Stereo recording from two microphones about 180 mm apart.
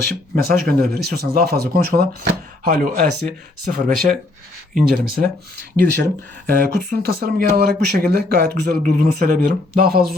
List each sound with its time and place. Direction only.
0.0 s speech: 60° right (ahead or behind)